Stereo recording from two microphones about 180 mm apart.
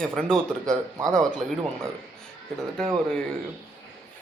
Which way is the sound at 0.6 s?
20° right (ahead or behind).